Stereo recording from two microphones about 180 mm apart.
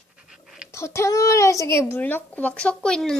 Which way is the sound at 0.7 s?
15° left (ahead or behind).